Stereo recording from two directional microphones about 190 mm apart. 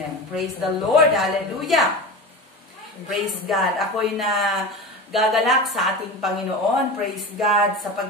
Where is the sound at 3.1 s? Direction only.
Centre (ahead or behind).